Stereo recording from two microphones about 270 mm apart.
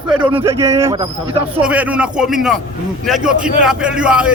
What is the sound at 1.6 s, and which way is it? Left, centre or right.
Speech, centre.